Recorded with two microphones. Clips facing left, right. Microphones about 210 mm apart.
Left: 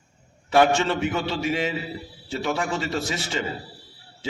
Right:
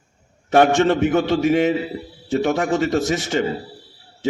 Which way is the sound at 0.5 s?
45° right (ahead or behind).